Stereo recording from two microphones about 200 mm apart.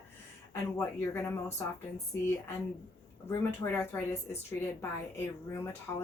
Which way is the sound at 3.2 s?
10° left (ahead or behind).